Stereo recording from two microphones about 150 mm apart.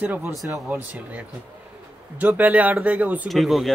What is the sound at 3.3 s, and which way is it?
Speech, centre (ahead or behind).